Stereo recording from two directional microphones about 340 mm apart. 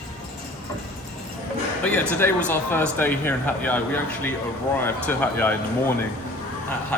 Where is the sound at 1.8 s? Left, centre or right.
Centre.